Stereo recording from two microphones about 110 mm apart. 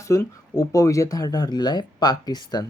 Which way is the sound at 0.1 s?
30° left (ahead or behind).